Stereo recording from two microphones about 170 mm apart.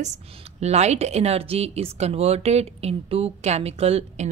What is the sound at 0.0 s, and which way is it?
A woman's voice, 40° right (ahead or behind).